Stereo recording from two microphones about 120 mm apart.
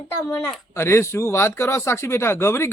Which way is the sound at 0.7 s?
20° left (ahead or behind).